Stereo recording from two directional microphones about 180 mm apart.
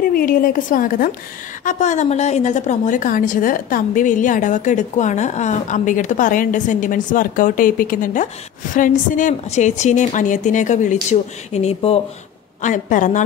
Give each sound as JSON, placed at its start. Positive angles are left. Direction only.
{"t": 0.1, "sound": "a woman's voice", "side_deg": 55}
{"t": 12.6, "sound": "a woman's voice", "side_deg": 45}